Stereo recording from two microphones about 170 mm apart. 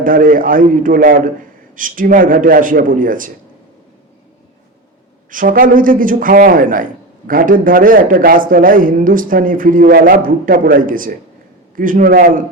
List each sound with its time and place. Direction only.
0.0 s a man's voice: 55° right (ahead or behind)
5.3 s a man's voice: 55° right (ahead or behind)